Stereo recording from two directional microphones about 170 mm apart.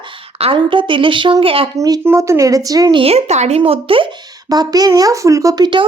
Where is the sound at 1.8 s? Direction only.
20° right (ahead or behind).